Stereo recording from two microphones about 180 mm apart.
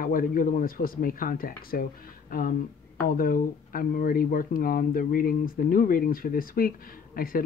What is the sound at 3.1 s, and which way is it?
A man's voice, 50° left (ahead or behind).